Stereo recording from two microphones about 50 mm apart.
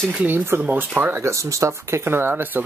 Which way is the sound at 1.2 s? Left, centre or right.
Right.